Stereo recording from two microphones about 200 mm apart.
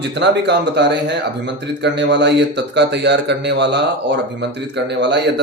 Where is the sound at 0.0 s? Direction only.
60° right (ahead or behind).